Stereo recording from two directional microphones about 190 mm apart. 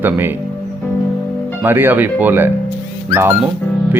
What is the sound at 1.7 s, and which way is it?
Speech, 10° right (ahead or behind).